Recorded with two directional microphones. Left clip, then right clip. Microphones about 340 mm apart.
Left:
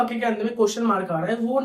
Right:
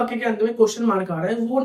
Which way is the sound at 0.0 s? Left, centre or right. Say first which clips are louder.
Right 2 dB; centre.